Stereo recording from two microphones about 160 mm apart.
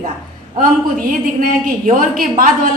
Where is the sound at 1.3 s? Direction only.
60° right (ahead or behind).